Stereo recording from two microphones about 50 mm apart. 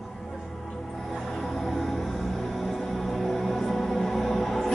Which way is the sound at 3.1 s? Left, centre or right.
Centre.